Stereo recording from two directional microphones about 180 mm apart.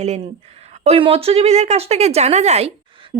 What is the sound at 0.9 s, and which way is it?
A woman's voice, 30° right (ahead or behind).